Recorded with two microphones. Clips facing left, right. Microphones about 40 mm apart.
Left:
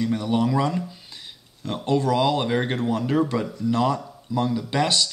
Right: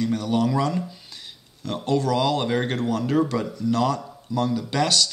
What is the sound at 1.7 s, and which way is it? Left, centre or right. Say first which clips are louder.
Speech: left 1 dB; centre.